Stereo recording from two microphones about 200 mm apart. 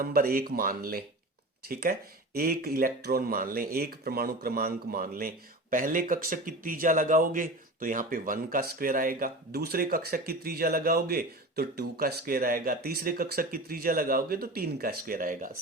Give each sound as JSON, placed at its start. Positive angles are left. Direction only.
{"t": 0.0, "sound": "a man's voice", "side_deg": -45}